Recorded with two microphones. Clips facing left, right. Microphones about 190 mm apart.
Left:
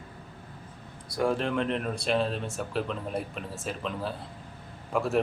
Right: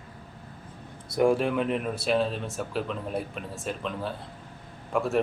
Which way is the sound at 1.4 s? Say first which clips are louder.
Right 2 dB; 5° right (ahead or behind).